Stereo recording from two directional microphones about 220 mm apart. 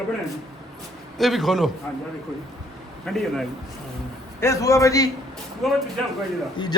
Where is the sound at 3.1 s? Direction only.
Centre (ahead or behind).